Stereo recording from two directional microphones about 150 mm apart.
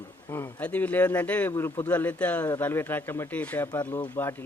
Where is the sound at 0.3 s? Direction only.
20° left (ahead or behind).